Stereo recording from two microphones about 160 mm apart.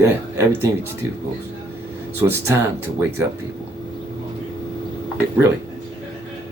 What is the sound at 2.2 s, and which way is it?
Speech, 15° right (ahead or behind).